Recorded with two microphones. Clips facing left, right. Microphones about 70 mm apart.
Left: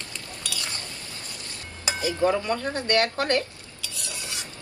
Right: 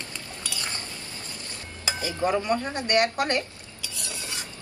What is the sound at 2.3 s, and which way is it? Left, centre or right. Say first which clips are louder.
Speech: right 1 dB; right.